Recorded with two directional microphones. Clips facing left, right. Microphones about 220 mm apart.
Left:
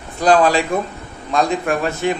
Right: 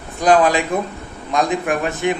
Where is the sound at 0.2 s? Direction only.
20° right (ahead or behind).